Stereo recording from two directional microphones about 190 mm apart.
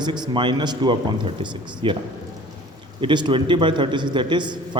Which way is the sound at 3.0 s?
25° right (ahead or behind).